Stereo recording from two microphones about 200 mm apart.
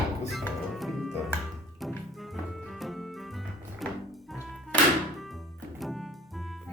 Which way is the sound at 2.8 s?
Centre (ahead or behind).